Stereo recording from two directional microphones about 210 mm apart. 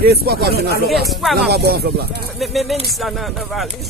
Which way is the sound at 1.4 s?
50° right (ahead or behind).